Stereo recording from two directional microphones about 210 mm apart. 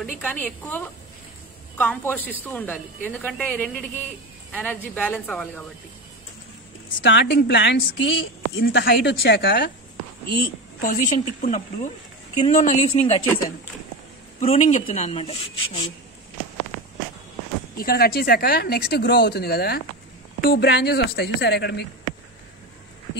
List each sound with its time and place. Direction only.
0.2 s a woman's voice: 5° left (ahead or behind)
7.0 s a woman's voice: 55° left (ahead or behind); by 13.2 s 35° left (ahead or behind)
14.4 s a woman's voice: 30° left (ahead or behind)
17.7 s a woman's voice: 45° left (ahead or behind)